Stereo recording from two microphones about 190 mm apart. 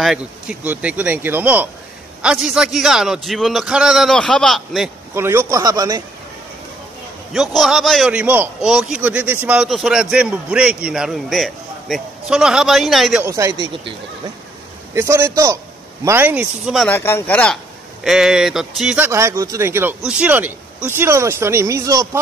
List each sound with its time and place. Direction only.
0.0 s a man's voice: 5° right (ahead or behind)
5.1 s speech: 10° right (ahead or behind)
7.3 s a man's voice: centre (ahead or behind)
13.2 s speech: 15° right (ahead or behind)
15.0 s speech: 15° right (ahead or behind)
16.9 s speech: 10° left (ahead or behind); by 22.2 s 15° right (ahead or behind)